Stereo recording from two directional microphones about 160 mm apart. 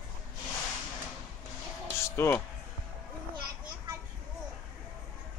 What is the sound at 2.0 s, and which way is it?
Music, 15° left (ahead or behind).